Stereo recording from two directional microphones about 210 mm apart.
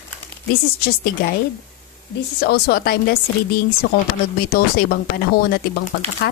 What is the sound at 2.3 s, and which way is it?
Speech, 50° left (ahead or behind).